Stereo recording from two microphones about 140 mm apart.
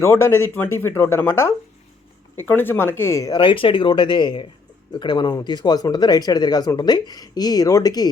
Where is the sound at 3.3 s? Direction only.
35° left (ahead or behind).